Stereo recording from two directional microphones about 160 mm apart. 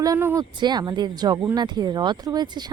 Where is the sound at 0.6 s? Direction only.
25° right (ahead or behind).